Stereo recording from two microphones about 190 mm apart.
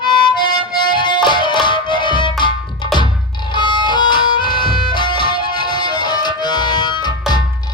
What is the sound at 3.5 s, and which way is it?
Music, 25° left (ahead or behind).